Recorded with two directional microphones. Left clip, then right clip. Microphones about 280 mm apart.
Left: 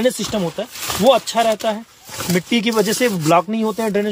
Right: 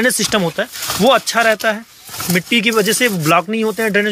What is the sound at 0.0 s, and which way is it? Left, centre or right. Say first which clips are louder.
Speech: right 4 dB; centre.